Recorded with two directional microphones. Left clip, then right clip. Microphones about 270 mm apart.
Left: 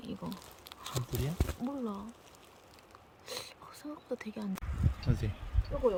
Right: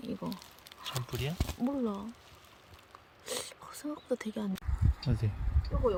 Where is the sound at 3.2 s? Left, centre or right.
Right.